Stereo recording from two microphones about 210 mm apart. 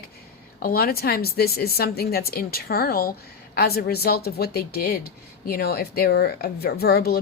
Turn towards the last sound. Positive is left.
turn(degrees=50)  # may be behind; listen again after turning